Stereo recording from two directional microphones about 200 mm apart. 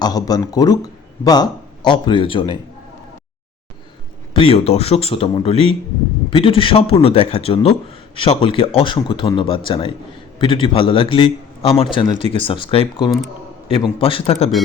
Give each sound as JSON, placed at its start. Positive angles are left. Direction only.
{"t": 0.0, "sound": "a man's voice", "side_deg": 20}
{"t": 4.4, "sound": "a man's voice", "side_deg": 30}